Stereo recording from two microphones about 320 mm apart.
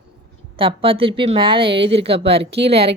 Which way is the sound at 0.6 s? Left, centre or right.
Centre.